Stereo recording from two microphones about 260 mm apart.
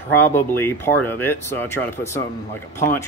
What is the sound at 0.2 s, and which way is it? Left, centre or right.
Speech, centre.